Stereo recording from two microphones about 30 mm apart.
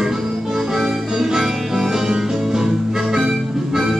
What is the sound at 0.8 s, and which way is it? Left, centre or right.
Music, centre.